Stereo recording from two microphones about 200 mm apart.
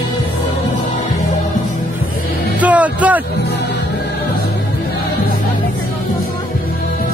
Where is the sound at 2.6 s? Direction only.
5° right (ahead or behind).